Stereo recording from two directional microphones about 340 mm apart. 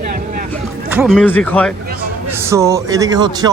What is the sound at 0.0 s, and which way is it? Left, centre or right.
Vehicle, right.